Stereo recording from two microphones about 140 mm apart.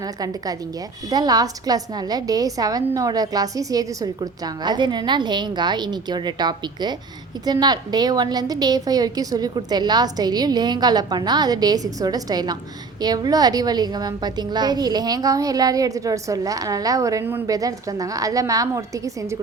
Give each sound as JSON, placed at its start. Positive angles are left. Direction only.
{"t": 0.0, "sound": "a woman's voice", "side_deg": -25}